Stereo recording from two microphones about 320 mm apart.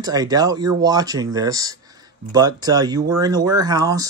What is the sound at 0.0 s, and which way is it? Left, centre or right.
Speech, centre.